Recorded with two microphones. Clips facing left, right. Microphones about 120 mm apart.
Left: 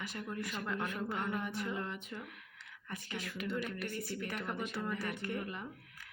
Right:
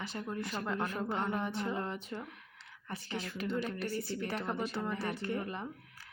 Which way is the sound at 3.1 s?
30° right (ahead or behind).